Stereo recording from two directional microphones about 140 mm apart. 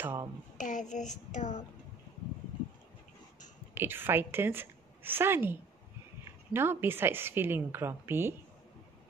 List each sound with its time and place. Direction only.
0.0 s speech: 15° right (ahead or behind)
0.6 s child singing: 65° left (ahead or behind)
3.7 s a woman's voice: 15° right (ahead or behind)